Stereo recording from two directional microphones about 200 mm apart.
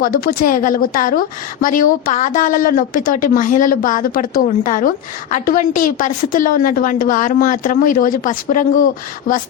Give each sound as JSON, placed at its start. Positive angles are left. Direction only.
{"t": 0.0, "sound": "speech", "side_deg": 45}